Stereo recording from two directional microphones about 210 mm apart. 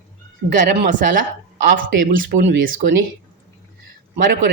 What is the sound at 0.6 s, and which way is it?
Speech, 40° right (ahead or behind).